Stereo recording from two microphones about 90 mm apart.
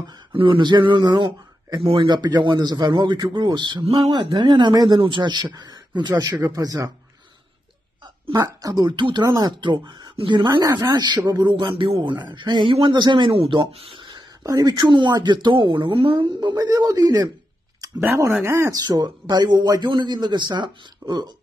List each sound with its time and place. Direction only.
0.3 s a man's voice: 75° right (ahead or behind)
2.0 s a man's voice: 50° right (ahead or behind); by 4.3 s 90° right
4.3 s a man's voice: 60° right (ahead or behind); by 6.9 s 40° right (ahead or behind)
8.3 s a man's voice: 45° right (ahead or behind); by 9.2 s 60° right (ahead or behind)
9.2 s a man's voice: 45° right (ahead or behind); by 10.6 s 60° right (ahead or behind)
10.6 s a man's voice: 40° right (ahead or behind)
11.5 s a man's voice: 70° right (ahead or behind)
14.4 s a man's voice: 45° right (ahead or behind); by 16.3 s 85° right
16.3 s a man's voice: 45° right (ahead or behind)
18.0 s speech: 25° right (ahead or behind)
18.8 s a man's voice: 50° right (ahead or behind)